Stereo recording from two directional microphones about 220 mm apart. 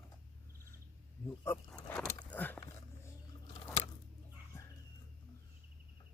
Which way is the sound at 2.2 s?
5° left (ahead or behind).